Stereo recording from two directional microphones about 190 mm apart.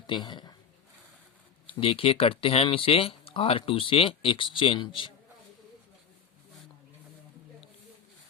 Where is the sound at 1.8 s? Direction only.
30° left (ahead or behind).